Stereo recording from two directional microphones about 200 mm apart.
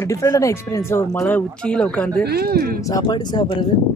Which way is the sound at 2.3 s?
50° right (ahead or behind).